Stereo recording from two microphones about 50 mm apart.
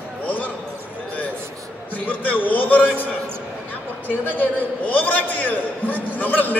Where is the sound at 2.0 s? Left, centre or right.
Left.